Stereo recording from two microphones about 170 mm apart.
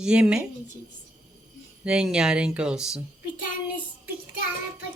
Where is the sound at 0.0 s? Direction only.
5° right (ahead or behind).